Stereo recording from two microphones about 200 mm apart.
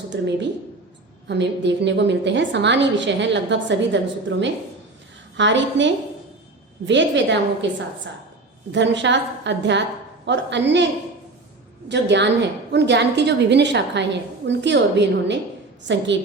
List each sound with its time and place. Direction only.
0.1 s a woman's voice: 60° right (ahead or behind)
8.7 s a woman's voice: 65° right (ahead or behind)
11.9 s a woman's voice: 60° right (ahead or behind)